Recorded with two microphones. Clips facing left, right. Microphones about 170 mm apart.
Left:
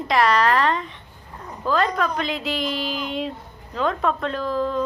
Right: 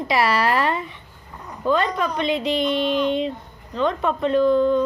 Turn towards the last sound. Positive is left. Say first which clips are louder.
# right 7 dB
turn(degrees=0)  # may be behind; listen again after turning